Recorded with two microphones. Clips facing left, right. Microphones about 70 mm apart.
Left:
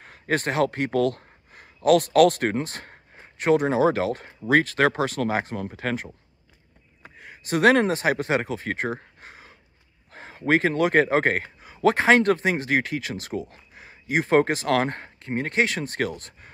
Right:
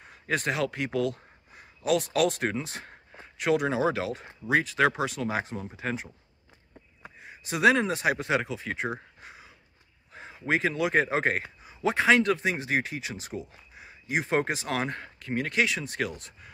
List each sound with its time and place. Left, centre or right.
0.1 s speech: left
3.2 s speech: left
5.6 s speech: left
7.2 s speech: left
8.9 s a sound: left
10.1 s speech: left
11.6 s speech: left
14.9 s speech: left
15.6 s speech: left